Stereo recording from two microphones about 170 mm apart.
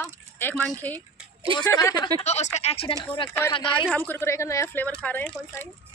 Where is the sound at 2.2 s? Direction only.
40° left (ahead or behind).